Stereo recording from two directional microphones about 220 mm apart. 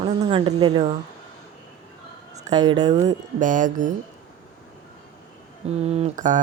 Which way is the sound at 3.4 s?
35° right (ahead or behind).